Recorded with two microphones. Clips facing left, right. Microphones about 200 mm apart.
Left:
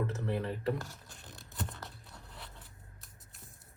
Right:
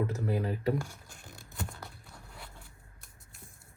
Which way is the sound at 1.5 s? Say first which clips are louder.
Even; centre (ahead or behind).